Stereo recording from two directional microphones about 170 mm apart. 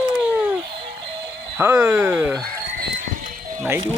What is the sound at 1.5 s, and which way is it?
Speech, 15° right (ahead or behind).